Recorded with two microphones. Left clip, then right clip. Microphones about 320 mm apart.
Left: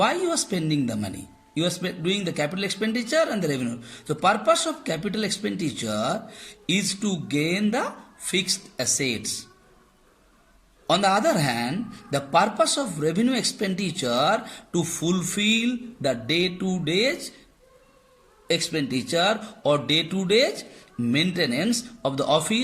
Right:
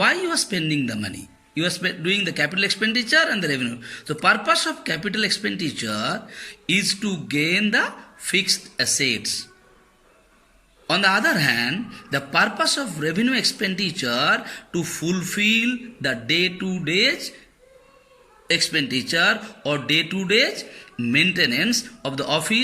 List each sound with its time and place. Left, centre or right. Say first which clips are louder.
0.0 s speech: right 3 dB; centre
10.8 s speech: right 2 dB; centre
18.4 s speech: right 4 dB; centre